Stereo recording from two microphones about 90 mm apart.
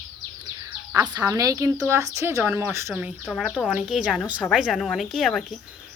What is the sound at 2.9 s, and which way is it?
A woman's voice, 10° right (ahead or behind).